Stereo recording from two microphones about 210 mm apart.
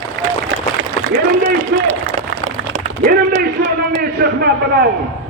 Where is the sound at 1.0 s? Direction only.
35° right (ahead or behind).